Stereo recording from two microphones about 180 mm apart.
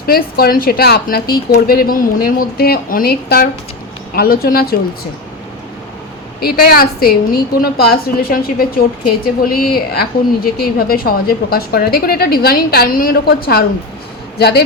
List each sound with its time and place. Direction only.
0.0 s a woman's voice: 55° left (ahead or behind)
6.4 s a woman's voice: 55° left (ahead or behind)